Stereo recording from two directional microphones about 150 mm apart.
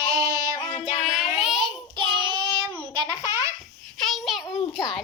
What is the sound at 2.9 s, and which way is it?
Baby laughter, 25° right (ahead or behind).